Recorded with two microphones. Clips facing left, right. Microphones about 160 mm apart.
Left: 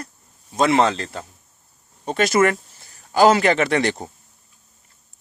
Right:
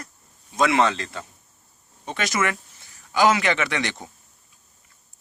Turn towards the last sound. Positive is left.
turn(degrees=35)  # may be behind; listen again after turning